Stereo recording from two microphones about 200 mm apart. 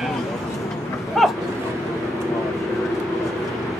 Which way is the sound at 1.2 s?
Centre (ahead or behind).